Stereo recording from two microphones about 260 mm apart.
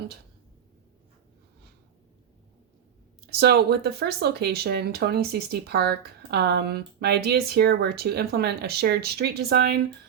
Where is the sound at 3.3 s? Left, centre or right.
Right.